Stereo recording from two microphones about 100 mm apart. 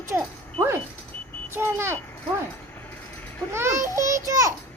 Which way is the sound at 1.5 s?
25° right (ahead or behind).